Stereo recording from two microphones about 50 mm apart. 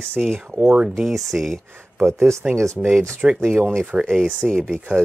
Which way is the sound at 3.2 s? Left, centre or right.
Centre.